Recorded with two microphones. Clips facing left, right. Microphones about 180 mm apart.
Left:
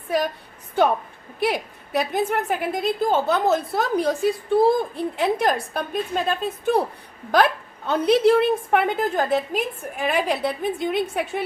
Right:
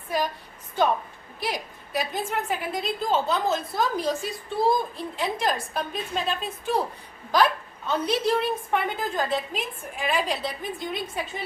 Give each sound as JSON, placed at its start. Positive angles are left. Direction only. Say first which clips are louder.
{"t": 1.4, "sound": "a woman's voice", "louder": "left 7 dB", "side_deg": 65}